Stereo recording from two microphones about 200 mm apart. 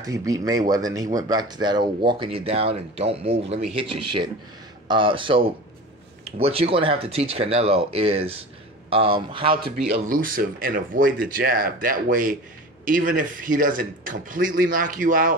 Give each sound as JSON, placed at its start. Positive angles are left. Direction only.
{"t": 0.0, "sound": "speech", "side_deg": -15}
{"t": 4.8, "sound": "speech", "side_deg": -25}
{"t": 9.9, "sound": "speech", "side_deg": -45}